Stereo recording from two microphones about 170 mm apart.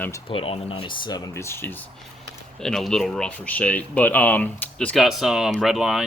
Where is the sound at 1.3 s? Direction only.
15° left (ahead or behind).